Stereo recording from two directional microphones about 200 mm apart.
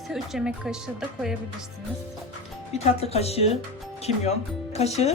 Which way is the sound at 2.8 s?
30° left (ahead or behind).